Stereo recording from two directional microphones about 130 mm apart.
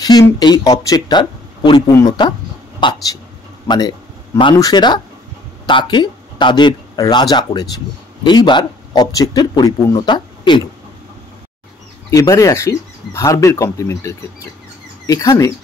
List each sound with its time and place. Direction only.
0.0 s a man's voice: 30° left (ahead or behind)
12.1 s speech: 25° left (ahead or behind)